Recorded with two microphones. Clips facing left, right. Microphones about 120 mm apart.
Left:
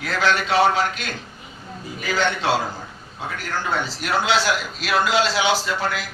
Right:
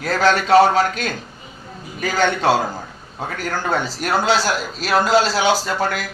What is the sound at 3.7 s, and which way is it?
Speech, 45° right (ahead or behind).